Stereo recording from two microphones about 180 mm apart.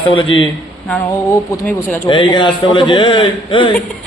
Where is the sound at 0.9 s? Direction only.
10° left (ahead or behind).